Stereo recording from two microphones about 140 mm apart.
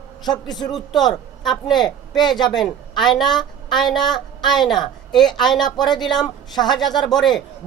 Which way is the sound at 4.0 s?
30° left (ahead or behind).